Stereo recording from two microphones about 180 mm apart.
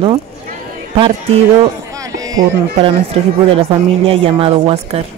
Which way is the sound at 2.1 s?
20° right (ahead or behind).